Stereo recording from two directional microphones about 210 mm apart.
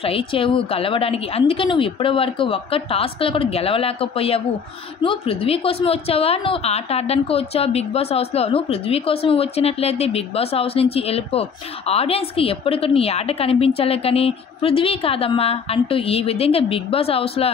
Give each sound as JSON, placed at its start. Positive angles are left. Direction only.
{"t": 0.0, "sound": "a woman's voice", "side_deg": 25}